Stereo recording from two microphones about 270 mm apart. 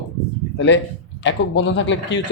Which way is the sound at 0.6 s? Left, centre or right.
Left.